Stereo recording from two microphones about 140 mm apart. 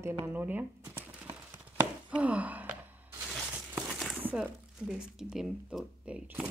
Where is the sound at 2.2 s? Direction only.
10° right (ahead or behind).